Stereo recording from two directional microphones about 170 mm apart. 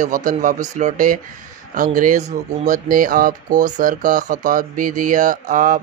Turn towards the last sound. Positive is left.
turn(degrees=-50)  # may be behind; listen again after turning